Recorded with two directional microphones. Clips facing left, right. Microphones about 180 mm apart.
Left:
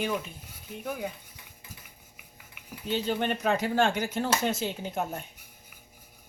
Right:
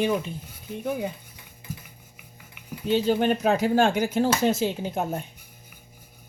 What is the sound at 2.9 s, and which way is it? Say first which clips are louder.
Speech: right 7 dB; 40° right (ahead or behind).